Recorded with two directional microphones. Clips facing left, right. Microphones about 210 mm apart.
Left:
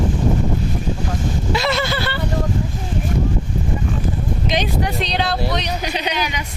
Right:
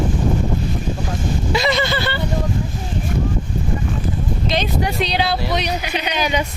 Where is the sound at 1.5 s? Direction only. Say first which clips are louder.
Right 2 dB; centre (ahead or behind).